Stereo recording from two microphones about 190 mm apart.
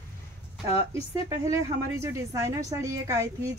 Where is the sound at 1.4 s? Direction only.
15° right (ahead or behind).